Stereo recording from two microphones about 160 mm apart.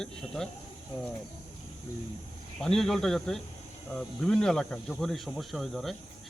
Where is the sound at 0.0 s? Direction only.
5° left (ahead or behind).